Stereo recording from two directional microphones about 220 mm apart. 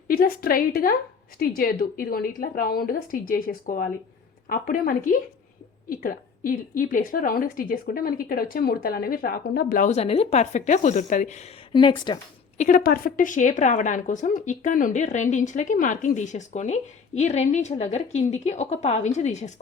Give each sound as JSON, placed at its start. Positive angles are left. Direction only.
{"t": 0.1, "sound": "a woman's voice", "side_deg": 40}
{"t": 12.5, "sound": "a woman's voice", "side_deg": 35}